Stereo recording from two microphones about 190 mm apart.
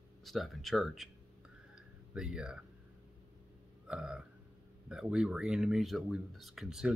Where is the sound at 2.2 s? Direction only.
5° right (ahead or behind).